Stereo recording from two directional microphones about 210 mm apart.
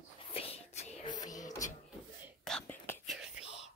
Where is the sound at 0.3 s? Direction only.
30° left (ahead or behind).